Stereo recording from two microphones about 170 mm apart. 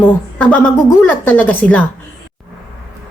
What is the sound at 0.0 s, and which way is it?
A woman's voice, 10° left (ahead or behind).